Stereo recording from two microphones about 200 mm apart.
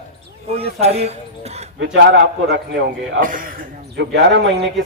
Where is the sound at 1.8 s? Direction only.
60° right (ahead or behind).